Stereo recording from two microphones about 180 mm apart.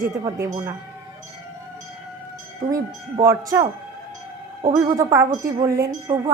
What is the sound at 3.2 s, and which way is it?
Speech, 20° right (ahead or behind).